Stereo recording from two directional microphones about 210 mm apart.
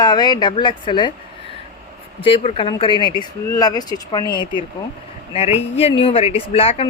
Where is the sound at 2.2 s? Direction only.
25° left (ahead or behind).